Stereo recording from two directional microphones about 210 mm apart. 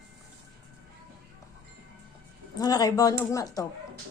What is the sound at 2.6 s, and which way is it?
Speech, 20° left (ahead or behind).